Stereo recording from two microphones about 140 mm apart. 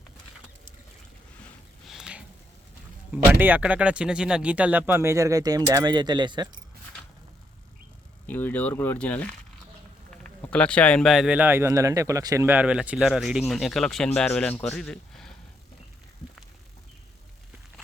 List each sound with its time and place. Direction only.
1.9 s a sound: 5° right (ahead or behind)
3.1 s speech: 10° right (ahead or behind); by 6.5 s 30° right (ahead or behind)
8.3 s speech: 15° left (ahead or behind)
10.5 s speech: 10° left (ahead or behind); by 12.5 s 25° right (ahead or behind)
12.5 s speech: 10° right (ahead or behind)